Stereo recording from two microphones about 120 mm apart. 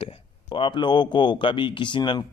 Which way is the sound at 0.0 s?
45° left (ahead or behind).